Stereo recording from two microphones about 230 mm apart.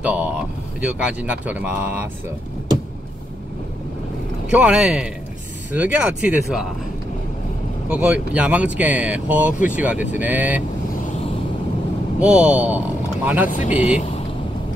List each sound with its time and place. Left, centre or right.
0.7 s speech: centre
4.5 s speech: centre
7.9 s speech: centre
12.2 s speech: centre
13.5 s speech: left